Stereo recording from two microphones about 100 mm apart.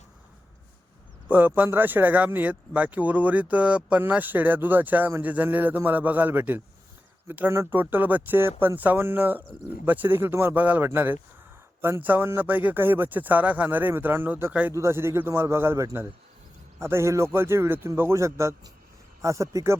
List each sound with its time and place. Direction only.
1.3 s a man's voice: 20° right (ahead or behind)